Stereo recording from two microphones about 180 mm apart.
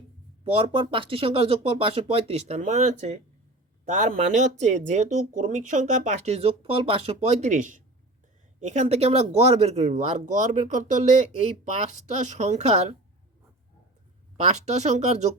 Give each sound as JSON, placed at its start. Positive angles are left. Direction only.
{"t": 0.4, "sound": "speech", "side_deg": -30}
{"t": 14.3, "sound": "speech", "side_deg": -40}